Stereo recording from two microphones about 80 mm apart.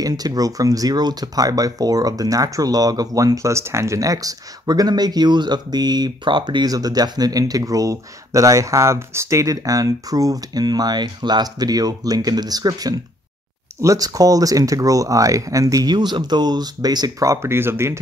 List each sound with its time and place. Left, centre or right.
0.0 s speech: right
17.3 s speech: right